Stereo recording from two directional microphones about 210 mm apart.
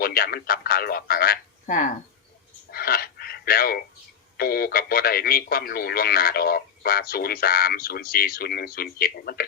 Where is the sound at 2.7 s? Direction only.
45° left (ahead or behind).